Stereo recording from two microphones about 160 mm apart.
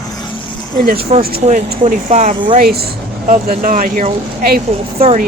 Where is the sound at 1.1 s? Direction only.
45° right (ahead or behind); by 4.6 s 60° right (ahead or behind).